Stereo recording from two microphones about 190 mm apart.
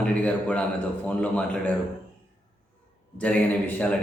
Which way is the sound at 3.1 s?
5° left (ahead or behind).